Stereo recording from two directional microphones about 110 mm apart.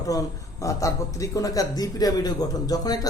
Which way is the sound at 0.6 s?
30° left (ahead or behind).